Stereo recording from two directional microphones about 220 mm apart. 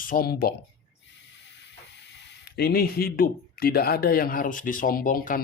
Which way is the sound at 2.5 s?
45° left (ahead or behind).